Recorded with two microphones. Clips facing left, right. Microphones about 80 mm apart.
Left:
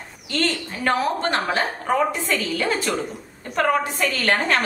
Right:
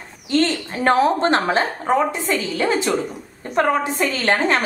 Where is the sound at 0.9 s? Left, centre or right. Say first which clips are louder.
Right 6 dB; right.